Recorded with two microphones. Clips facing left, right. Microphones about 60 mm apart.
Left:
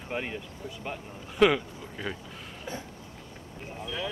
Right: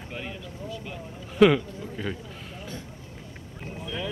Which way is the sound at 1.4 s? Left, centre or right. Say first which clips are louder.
Right 4 dB; centre.